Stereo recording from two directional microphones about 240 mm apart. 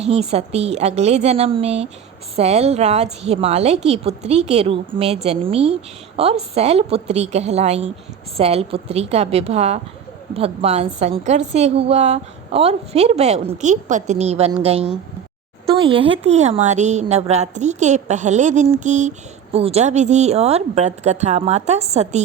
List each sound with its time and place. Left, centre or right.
0.0 s a woman's voice: right